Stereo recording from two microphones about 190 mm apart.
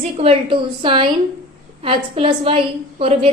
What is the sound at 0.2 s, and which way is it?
A woman's voice, 30° right (ahead or behind).